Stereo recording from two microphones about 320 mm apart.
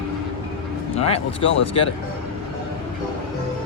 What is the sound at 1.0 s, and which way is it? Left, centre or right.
Speech, centre.